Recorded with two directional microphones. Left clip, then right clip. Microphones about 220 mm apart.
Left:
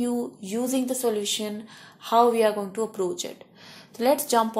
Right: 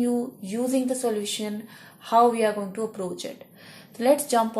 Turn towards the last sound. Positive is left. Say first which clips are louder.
# right 1 dB
turn(degrees=25)  # may be behind; listen again after turning